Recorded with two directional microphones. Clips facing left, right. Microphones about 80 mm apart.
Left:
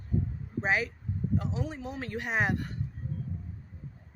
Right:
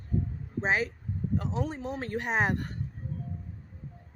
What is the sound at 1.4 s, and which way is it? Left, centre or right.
Speech, right.